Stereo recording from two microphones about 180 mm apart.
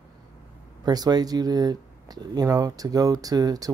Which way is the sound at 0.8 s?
20° right (ahead or behind).